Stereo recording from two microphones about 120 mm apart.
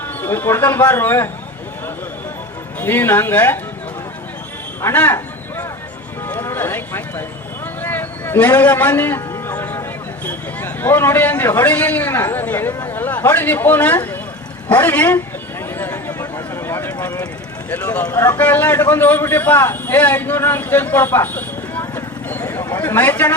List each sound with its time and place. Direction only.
0.2 s speech: 20° left (ahead or behind)
2.8 s a man's voice: 15° left (ahead or behind)
4.8 s a sound: 20° left (ahead or behind)
10.2 s a man's voice: 15° left (ahead or behind)
15.8 s a sound: 20° left (ahead or behind)
17.7 s a man's voice: 15° left (ahead or behind)